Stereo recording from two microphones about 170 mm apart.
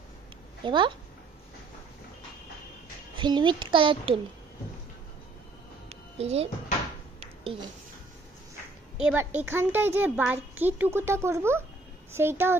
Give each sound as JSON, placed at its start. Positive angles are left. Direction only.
{"t": 0.7, "sound": "a woman's voice", "side_deg": -30}
{"t": 3.2, "sound": "a woman's voice", "side_deg": -25}
{"t": 5.9, "sound": "music", "side_deg": -40}
{"t": 9.0, "sound": "speech", "side_deg": -10}